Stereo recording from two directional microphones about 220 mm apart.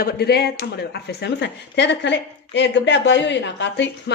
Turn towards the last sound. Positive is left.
turn(degrees=55)  # may be behind; listen again after turning